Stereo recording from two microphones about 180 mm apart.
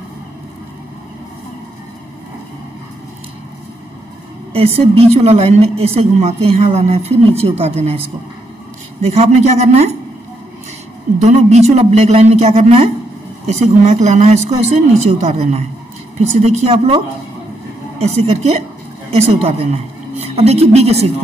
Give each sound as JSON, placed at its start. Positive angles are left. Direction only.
{"t": 4.5, "sound": "a woman's voice", "side_deg": -35}
{"t": 11.1, "sound": "a woman's voice", "side_deg": -35}